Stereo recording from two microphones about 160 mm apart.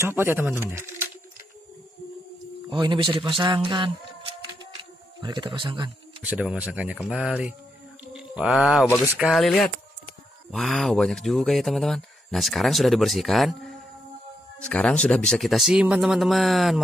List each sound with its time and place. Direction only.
0.0 s speech: 15° right (ahead or behind)
2.7 s speech: 30° right (ahead or behind)
6.2 s speech: 5° right (ahead or behind)
8.0 s mantra: 5° right (ahead or behind)
9.0 s speech: 5° right (ahead or behind)